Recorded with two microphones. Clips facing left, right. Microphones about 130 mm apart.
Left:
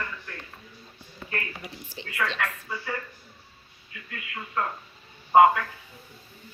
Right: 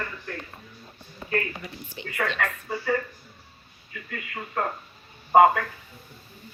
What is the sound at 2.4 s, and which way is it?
Speech, 40° right (ahead or behind).